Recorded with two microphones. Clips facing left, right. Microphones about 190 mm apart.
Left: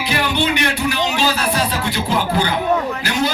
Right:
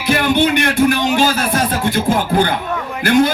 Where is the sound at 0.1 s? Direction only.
50° right (ahead or behind).